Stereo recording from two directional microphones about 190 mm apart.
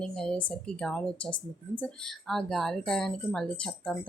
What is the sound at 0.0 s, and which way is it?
Speech, 5° left (ahead or behind).